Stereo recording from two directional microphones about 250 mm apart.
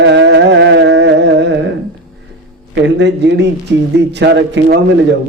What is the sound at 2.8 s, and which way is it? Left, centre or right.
A man's voice, right.